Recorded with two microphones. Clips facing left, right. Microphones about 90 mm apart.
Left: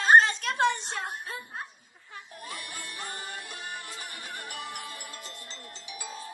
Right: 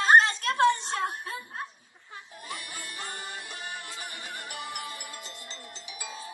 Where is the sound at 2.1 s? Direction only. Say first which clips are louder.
Right 1 dB; 10° right (ahead or behind).